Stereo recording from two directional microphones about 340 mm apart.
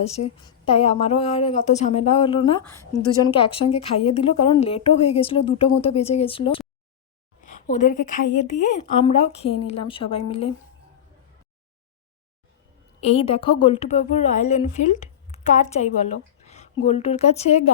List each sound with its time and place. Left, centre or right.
0.0 s a woman's voice: centre
13.0 s a woman's voice: centre